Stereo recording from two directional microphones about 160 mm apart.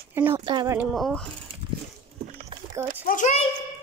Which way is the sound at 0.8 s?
Centre (ahead or behind).